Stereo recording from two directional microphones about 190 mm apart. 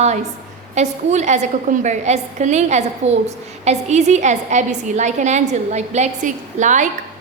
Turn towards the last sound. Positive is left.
turn(degrees=-40)  # may be behind; listen again after turning